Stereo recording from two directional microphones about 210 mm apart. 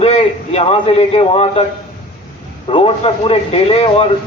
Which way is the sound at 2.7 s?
25° left (ahead or behind).